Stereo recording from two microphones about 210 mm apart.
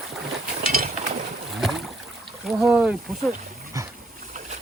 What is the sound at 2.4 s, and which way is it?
Speech, 5° right (ahead or behind).